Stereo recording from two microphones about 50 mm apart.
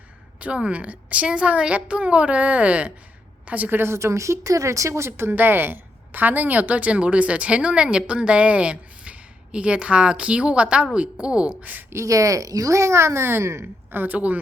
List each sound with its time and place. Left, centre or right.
0.3 s a sound: right
0.7 s a woman's voice: right
3.9 s speech: right
5.3 s a woman's voice: right; by 11.5 s centre
11.6 s a woman's voice: right
11.9 s speech: right
13.9 s a woman's voice: right